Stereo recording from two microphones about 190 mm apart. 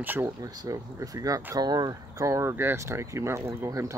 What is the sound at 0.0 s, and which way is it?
Speech, 10° right (ahead or behind).